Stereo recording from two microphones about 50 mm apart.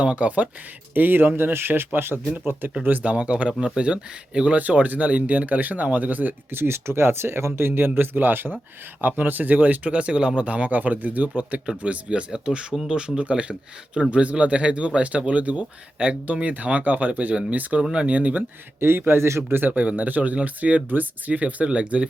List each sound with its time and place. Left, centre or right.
0.0 s speech: right
0.9 s speech: right
3.0 s speech: right
6.5 s speech: right
18.8 s speech: right
19.5 s speech: right
19.7 s speech: right